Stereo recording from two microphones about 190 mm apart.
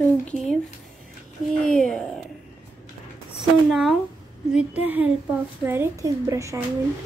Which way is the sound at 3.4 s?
Centre (ahead or behind).